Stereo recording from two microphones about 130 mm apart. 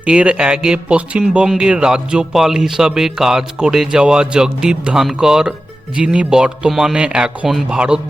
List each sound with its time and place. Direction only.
0.0 s speech: 10° right (ahead or behind)